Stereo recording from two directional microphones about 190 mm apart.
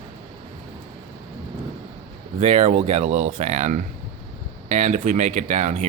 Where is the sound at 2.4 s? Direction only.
35° right (ahead or behind).